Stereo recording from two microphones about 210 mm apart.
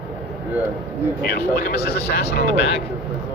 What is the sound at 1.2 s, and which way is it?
Speech, 50° left (ahead or behind).